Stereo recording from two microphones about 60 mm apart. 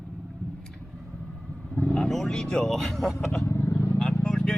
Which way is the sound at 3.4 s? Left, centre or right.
Left.